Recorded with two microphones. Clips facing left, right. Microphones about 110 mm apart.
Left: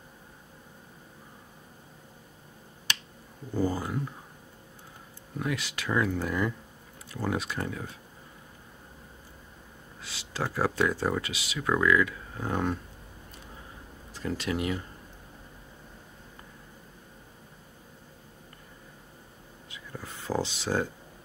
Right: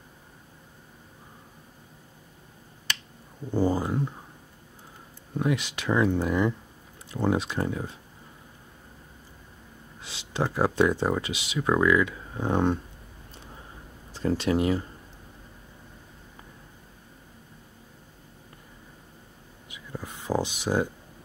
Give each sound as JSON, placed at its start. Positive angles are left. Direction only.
{"t": 3.5, "sound": "speech", "side_deg": -25}
{"t": 5.4, "sound": "speech", "side_deg": -20}
{"t": 10.0, "sound": "speech", "side_deg": -20}
{"t": 14.1, "sound": "speech", "side_deg": -30}
{"t": 19.7, "sound": "a sound", "side_deg": -15}